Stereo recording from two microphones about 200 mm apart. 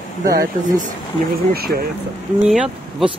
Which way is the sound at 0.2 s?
45° right (ahead or behind).